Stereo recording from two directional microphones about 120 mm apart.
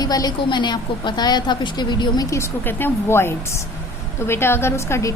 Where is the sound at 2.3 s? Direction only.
20° left (ahead or behind).